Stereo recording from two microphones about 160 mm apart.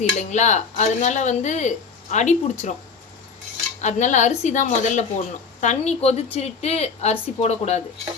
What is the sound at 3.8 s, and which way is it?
A woman's voice, 50° left (ahead or behind).